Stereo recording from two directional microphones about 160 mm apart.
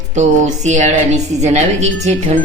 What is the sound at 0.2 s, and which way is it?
A woman's voice, 50° right (ahead or behind).